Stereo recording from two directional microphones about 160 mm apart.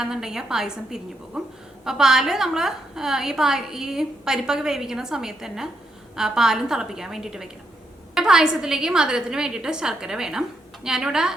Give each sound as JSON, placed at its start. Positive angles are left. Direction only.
{"t": 0.0, "sound": "a woman's voice", "side_deg": -5}